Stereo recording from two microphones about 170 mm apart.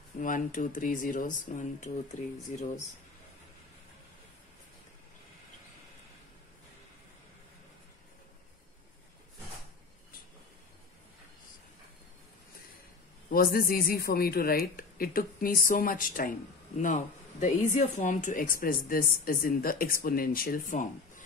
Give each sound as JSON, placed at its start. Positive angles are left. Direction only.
{"t": 0.2, "sound": "speech", "side_deg": 50}
{"t": 13.3, "sound": "speech", "side_deg": 60}